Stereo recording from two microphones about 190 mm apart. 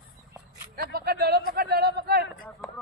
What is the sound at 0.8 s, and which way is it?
Speech, 55° right (ahead or behind).